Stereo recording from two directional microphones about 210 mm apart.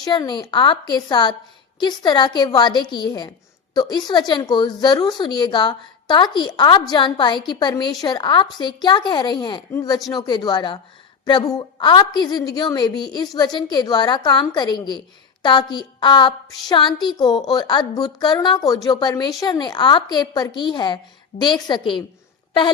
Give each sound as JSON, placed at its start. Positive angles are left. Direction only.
{"t": 0.0, "sound": "a woman's voice", "side_deg": 20}